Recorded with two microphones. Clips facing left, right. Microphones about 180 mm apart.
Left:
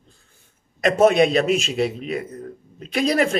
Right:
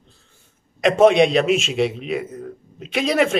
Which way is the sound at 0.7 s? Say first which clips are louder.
Right 2 dB; centre (ahead or behind).